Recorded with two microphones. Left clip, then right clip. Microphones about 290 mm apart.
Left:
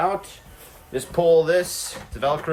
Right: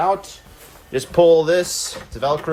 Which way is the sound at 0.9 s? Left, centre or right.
Right.